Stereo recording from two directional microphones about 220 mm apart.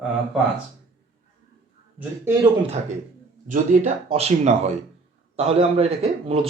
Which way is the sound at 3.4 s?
35° right (ahead or behind).